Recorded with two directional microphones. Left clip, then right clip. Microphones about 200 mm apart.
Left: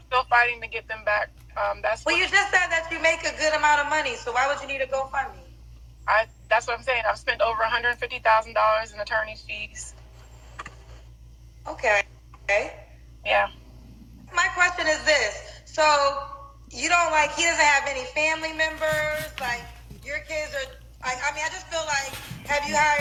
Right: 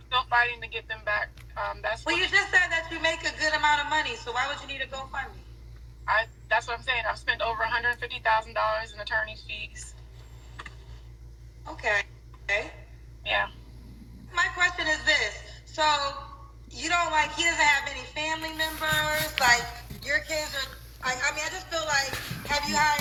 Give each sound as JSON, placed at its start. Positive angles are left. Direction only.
{"t": 0.1, "sound": "speech", "side_deg": 30}
{"t": 11.6, "sound": "a man's voice", "side_deg": 30}
{"t": 20.1, "sound": "speech", "side_deg": -10}
{"t": 21.0, "sound": "a man's voice", "side_deg": 30}
{"t": 22.4, "sound": "speech", "side_deg": 20}